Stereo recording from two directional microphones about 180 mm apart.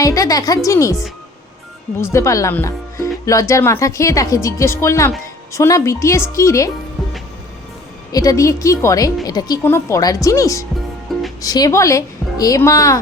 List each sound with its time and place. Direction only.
0.0 s a woman's voice: 20° left (ahead or behind)
2.1 s speech: 15° left (ahead or behind)
8.1 s speech: 20° left (ahead or behind)
11.1 s music: centre (ahead or behind)
11.4 s a woman's voice: 20° left (ahead or behind)